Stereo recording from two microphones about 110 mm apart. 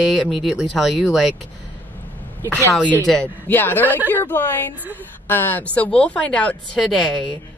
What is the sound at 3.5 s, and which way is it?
Speech, 15° left (ahead or behind).